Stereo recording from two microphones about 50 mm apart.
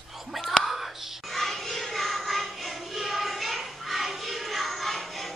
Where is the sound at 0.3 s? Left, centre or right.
Centre.